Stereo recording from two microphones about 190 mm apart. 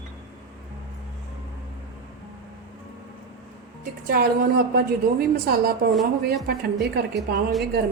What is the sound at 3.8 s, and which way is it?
A woman's voice, 50° right (ahead or behind).